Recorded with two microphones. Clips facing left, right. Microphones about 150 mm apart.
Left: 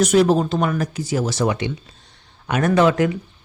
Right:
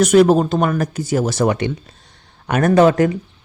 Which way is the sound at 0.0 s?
55° right (ahead or behind).